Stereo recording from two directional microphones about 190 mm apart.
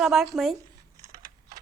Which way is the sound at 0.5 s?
20° right (ahead or behind).